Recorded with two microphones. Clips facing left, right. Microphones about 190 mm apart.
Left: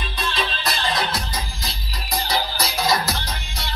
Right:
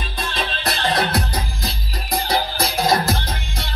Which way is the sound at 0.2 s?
55° right (ahead or behind).